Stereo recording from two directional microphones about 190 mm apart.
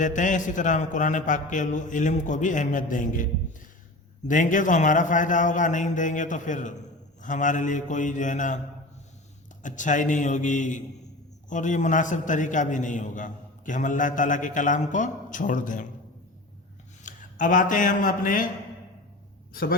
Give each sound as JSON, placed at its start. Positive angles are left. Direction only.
{"t": 0.0, "sound": "a man's voice", "side_deg": 40}
{"t": 4.3, "sound": "a man's voice", "side_deg": 45}
{"t": 9.6, "sound": "a man's voice", "side_deg": 40}
{"t": 17.0, "sound": "a man's voice", "side_deg": 45}